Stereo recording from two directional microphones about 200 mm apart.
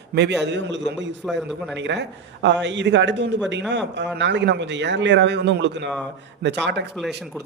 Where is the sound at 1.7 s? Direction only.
60° right (ahead or behind).